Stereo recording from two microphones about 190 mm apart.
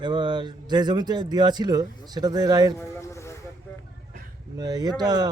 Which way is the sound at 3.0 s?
15° left (ahead or behind).